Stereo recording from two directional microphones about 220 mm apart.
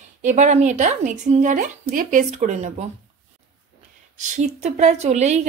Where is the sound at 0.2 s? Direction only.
35° right (ahead or behind).